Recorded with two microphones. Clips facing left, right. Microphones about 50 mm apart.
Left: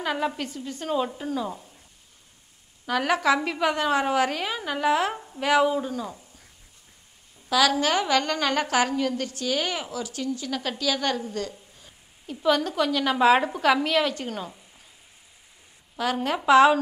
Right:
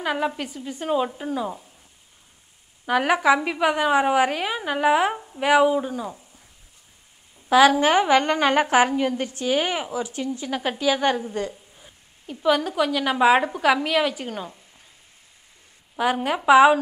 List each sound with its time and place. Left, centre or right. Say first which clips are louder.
0.0 s a woman's voice: right 2 dB; centre
2.8 s a woman's voice: right 3 dB; centre
7.4 s a woman's voice: right 6 dB; right
12.3 s a woman's voice: right 2 dB; centre
16.0 s a woman's voice: right 3 dB; centre